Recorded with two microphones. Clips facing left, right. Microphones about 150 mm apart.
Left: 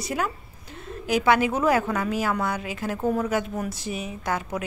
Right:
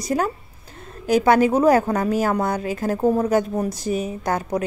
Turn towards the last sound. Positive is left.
turn(degrees=-40)  # may be behind; listen again after turning